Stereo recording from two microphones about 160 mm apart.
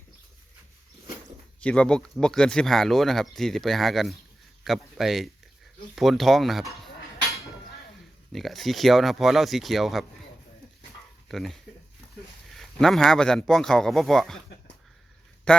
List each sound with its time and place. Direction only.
1.6 s speech: 5° left (ahead or behind)
8.3 s speech: centre (ahead or behind)
11.3 s speech: centre (ahead or behind)
12.5 s speech: centre (ahead or behind)
15.5 s speech: 5° left (ahead or behind)